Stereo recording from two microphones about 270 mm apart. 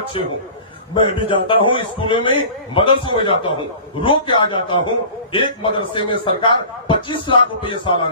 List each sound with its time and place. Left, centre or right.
0.9 s a man's voice: centre